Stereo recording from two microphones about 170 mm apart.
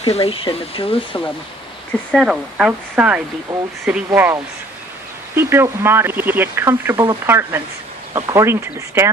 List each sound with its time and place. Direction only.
0.0 s speech: 35° left (ahead or behind)
2.1 s speech: centre (ahead or behind)